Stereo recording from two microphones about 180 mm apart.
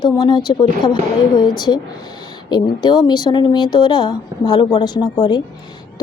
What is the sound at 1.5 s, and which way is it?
Speech, 25° left (ahead or behind).